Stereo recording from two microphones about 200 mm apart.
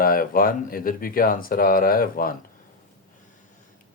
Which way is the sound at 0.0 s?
45° left (ahead or behind).